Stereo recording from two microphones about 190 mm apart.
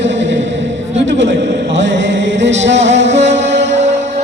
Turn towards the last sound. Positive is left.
turn(degrees=-65)  # may be behind; listen again after turning